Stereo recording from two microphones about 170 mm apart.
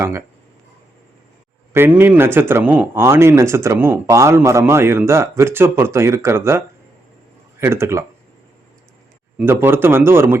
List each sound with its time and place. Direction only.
0.0 s speech: 15° right (ahead or behind)
1.7 s speech: 15° right (ahead or behind)
7.6 s speech: 15° right (ahead or behind)
9.4 s speech: 15° right (ahead or behind)